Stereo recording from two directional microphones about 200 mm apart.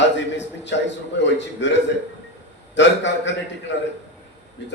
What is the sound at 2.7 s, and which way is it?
Speech, 65° left (ahead or behind).